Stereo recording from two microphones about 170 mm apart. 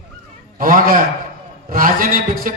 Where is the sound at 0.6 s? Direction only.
55° right (ahead or behind).